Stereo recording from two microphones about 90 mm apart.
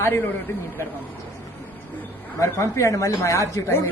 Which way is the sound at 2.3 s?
35° left (ahead or behind).